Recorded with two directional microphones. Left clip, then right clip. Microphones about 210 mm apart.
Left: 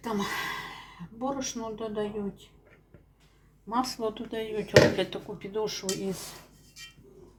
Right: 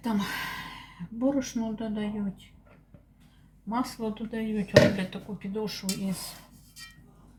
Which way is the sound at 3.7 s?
30° left (ahead or behind).